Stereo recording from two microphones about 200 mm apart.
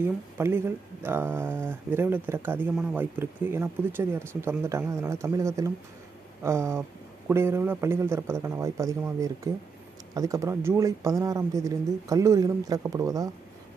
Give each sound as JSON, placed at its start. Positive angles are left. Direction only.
{"t": 0.0, "sound": "speech", "side_deg": -10}